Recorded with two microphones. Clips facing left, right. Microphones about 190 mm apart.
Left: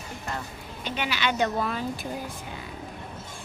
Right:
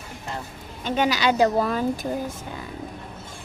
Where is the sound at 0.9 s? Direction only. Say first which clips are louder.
Right 7 dB; 45° right (ahead or behind).